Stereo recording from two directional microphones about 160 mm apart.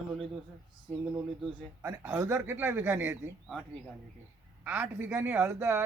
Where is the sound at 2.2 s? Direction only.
20° right (ahead or behind).